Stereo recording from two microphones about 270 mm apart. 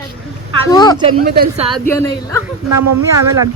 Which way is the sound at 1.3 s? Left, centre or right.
Right.